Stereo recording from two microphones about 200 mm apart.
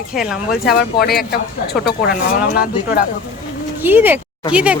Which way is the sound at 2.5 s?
50° left (ahead or behind).